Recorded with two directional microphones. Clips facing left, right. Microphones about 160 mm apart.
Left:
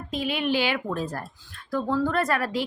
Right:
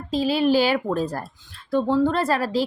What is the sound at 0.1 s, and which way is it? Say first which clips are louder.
A woman's voice: right 7 dB; 35° right (ahead or behind).